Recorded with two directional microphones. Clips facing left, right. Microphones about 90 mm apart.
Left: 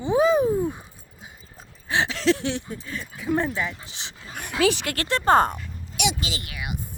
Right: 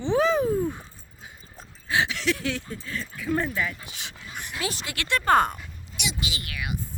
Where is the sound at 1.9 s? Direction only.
30° left (ahead or behind).